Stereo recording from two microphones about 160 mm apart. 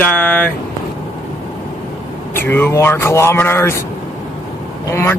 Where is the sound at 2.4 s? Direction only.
15° left (ahead or behind).